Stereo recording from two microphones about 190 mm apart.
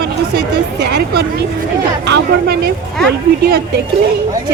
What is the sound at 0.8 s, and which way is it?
Speech, 60° right (ahead or behind).